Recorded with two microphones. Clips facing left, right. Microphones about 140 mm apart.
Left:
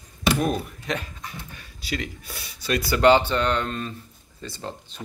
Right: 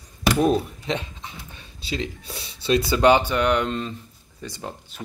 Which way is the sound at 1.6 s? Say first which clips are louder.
Right 2 dB; 25° right (ahead or behind).